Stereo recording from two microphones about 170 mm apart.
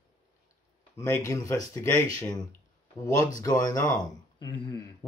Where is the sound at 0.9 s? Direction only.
15° left (ahead or behind).